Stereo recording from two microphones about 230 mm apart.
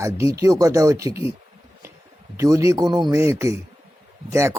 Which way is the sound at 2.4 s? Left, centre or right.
Centre.